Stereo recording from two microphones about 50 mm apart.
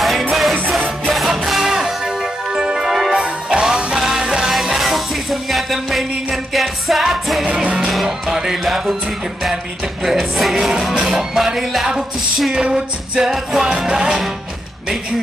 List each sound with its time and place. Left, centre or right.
0.3 s music: centre
4.6 s music: centre
7.6 s music: right
7.9 s music: centre
10.3 s music: centre
12.5 s music: centre
13.3 s music: centre
13.7 s music: centre